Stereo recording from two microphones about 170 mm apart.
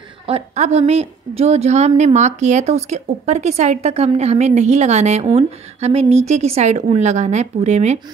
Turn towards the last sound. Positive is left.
turn(degrees=-40)  # may be behind; listen again after turning